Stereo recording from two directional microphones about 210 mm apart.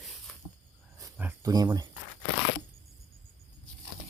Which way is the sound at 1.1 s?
10° right (ahead or behind).